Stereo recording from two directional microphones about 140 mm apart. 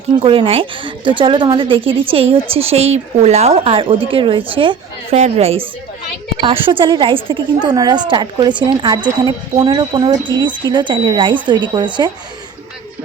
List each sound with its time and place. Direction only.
0.2 s a woman's voice: 40° right (ahead or behind)
5.1 s a woman's voice: 50° right (ahead or behind); by 12.1 s 35° right (ahead or behind)